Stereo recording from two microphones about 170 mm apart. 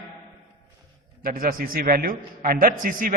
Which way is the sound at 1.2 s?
55° right (ahead or behind).